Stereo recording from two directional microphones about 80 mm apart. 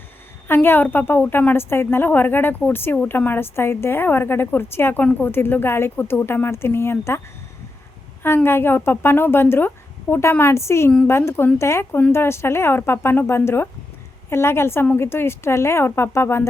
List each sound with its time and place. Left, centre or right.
0.4 s a woman's voice: left
8.4 s a woman's voice: left